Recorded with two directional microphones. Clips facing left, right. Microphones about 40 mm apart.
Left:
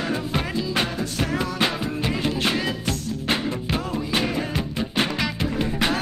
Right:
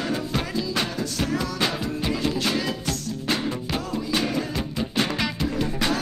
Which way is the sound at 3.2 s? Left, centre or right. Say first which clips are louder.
Left 1 dB; left.